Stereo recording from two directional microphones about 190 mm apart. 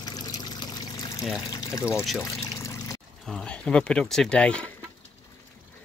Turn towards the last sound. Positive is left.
turn(degrees=5)  # may be behind; listen again after turning